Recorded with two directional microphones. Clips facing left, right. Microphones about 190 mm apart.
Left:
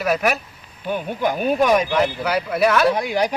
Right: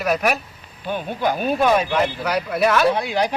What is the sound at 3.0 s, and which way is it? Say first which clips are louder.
Speech: left 1 dB; 10° left (ahead or behind).